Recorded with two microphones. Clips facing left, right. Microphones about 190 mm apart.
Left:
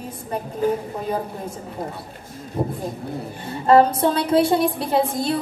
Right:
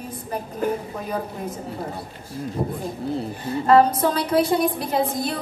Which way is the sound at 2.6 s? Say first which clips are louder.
Left 3 dB; 25° left (ahead or behind).